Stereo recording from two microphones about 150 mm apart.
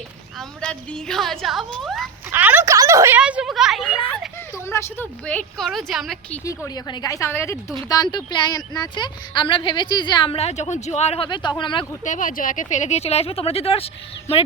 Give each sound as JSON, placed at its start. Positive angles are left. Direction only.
{"t": 0.3, "sound": "a woman's voice", "side_deg": 5}
{"t": 2.3, "sound": "speech", "side_deg": -10}
{"t": 2.7, "sound": "a sound", "side_deg": -20}
{"t": 3.2, "sound": "speech", "side_deg": -5}
{"t": 4.5, "sound": "a woman's voice", "side_deg": 20}
{"t": 6.7, "sound": "a woman's voice", "side_deg": 25}
{"t": 12.0, "sound": "speech", "side_deg": 60}